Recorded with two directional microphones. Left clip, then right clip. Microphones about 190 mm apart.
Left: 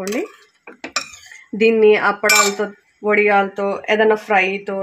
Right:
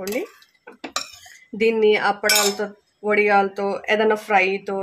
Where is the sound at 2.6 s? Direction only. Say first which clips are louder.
Left 4 dB; 20° left (ahead or behind).